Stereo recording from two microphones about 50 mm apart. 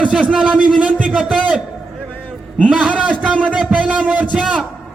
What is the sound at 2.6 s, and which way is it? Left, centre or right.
Speech, centre.